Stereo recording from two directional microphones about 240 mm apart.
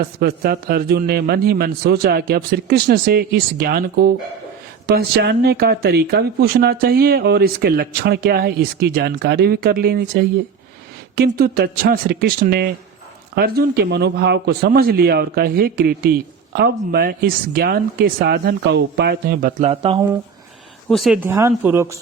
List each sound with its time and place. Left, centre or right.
0.0 s speech: right
20.9 s speech: centre